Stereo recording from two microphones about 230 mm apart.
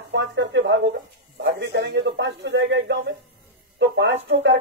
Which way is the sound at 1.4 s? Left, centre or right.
Right.